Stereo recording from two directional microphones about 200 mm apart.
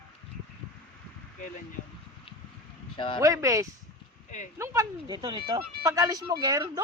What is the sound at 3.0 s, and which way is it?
Speech, 25° left (ahead or behind).